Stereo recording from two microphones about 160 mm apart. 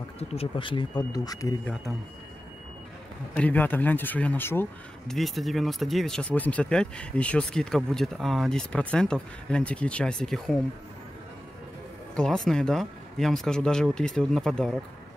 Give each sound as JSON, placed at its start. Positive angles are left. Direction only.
{"t": 0.2, "sound": "speech", "side_deg": 40}
{"t": 1.6, "sound": "speech", "side_deg": 5}
{"t": 3.3, "sound": "speech", "side_deg": 10}
{"t": 5.0, "sound": "speech", "side_deg": 0}
{"t": 12.2, "sound": "speech", "side_deg": 5}